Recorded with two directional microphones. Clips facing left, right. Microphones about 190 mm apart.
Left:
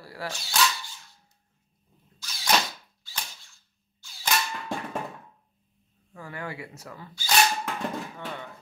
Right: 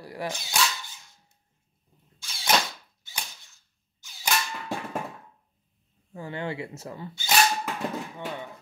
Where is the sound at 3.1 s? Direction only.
20° right (ahead or behind).